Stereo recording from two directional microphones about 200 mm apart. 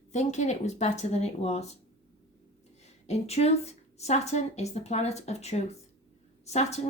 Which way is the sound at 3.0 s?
35° left (ahead or behind).